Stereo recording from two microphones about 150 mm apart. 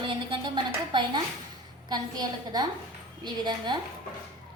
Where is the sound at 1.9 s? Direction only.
25° right (ahead or behind).